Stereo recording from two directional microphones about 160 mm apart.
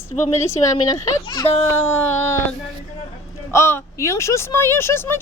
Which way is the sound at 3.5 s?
15° left (ahead or behind).